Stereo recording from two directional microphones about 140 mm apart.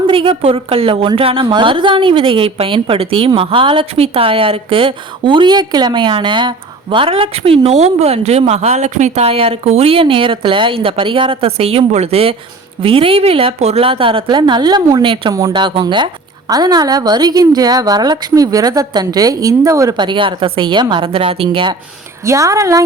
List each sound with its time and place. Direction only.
0.1 s a woman's voice: 40° right (ahead or behind)
22.2 s a woman's voice: 20° right (ahead or behind)